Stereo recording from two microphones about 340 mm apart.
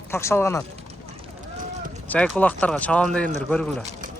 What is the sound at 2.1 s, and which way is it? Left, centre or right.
Speech, centre.